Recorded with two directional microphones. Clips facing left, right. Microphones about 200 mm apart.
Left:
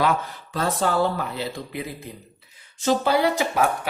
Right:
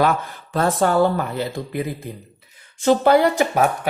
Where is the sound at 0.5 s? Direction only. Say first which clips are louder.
Right 5 dB; 55° right (ahead or behind).